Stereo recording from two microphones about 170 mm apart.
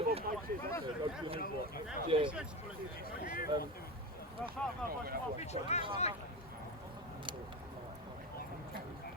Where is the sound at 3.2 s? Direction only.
55° left (ahead or behind).